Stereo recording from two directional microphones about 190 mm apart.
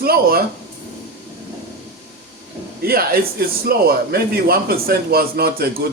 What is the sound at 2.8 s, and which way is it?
Speech, 50° right (ahead or behind).